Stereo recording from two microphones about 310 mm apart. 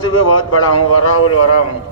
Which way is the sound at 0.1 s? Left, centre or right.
Left.